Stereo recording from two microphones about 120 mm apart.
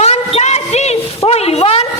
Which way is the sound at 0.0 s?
60° left (ahead or behind).